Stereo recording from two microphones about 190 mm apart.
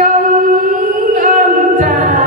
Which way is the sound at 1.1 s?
45° right (ahead or behind).